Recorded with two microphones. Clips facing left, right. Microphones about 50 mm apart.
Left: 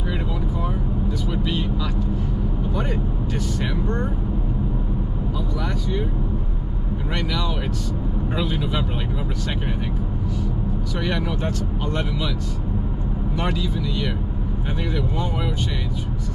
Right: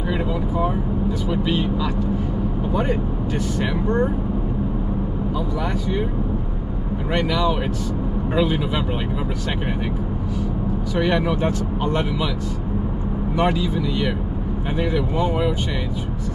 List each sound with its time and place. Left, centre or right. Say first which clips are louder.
1.3 s vehicle: right 5 dB; centre
2.7 s speech: right 6 dB; centre
7.2 s speech: right 7 dB; centre
11.0 s speech: right 6 dB; centre
13.4 s speech: right 6 dB; centre